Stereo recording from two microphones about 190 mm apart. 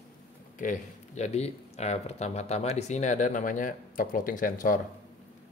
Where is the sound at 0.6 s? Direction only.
40° left (ahead or behind).